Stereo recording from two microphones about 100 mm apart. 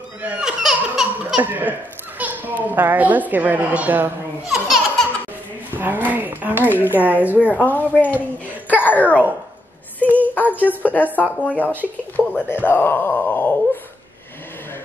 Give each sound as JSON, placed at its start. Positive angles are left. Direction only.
{"t": 0.2, "sound": "laughter", "side_deg": -10}
{"t": 1.4, "sound": "a woman's voice", "side_deg": -20}
{"t": 4.5, "sound": "speech", "side_deg": 0}
{"t": 5.8, "sound": "speech", "side_deg": -20}
{"t": 7.5, "sound": "a child's voice", "side_deg": 15}
{"t": 10.0, "sound": "a sound", "side_deg": -20}
{"t": 10.8, "sound": "speech", "side_deg": 15}
{"t": 11.6, "sound": "speech", "side_deg": -20}
{"t": 12.4, "sound": "speech", "side_deg": 20}